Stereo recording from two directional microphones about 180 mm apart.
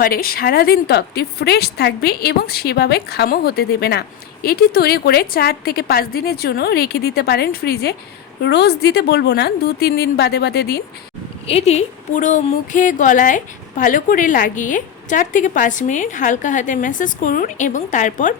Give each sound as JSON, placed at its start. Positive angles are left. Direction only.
{"t": 0.0, "sound": "a woman's voice", "side_deg": 55}
{"t": 11.4, "sound": "a woman's voice", "side_deg": 35}